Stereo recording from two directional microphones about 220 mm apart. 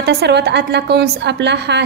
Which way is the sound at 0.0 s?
50° right (ahead or behind).